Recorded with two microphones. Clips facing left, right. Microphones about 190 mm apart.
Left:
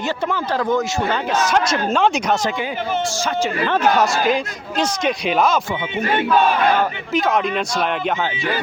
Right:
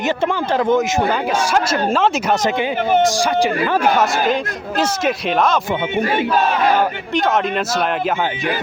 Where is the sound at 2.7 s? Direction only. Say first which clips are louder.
Right 6 dB; 60° right (ahead or behind).